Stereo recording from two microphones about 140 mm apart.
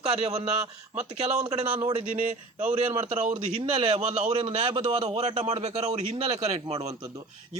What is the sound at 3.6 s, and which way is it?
A man's voice, 40° right (ahead or behind).